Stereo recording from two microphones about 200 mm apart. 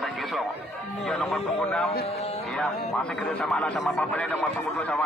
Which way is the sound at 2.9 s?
5° left (ahead or behind).